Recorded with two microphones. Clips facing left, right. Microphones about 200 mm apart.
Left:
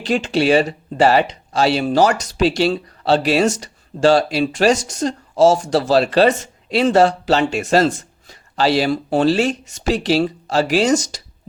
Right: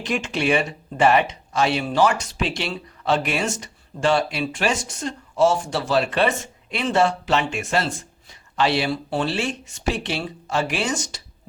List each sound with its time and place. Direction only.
0.0 s a woman's voice: 35° left (ahead or behind)